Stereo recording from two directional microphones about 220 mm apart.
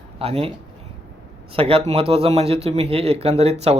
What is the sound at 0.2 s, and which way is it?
Speech, 25° right (ahead or behind).